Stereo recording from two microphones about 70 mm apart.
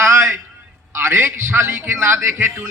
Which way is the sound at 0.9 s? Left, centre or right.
Right.